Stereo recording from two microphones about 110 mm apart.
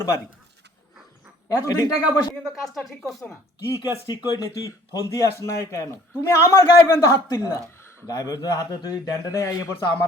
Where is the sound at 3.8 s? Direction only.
40° left (ahead or behind).